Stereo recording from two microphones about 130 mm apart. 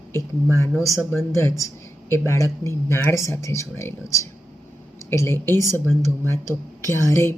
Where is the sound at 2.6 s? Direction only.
20° left (ahead or behind).